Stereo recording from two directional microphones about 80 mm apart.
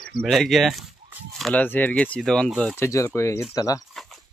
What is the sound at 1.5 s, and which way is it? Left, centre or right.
Speech, left.